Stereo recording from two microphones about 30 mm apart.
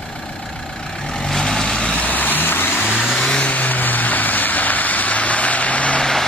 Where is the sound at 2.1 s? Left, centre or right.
Left.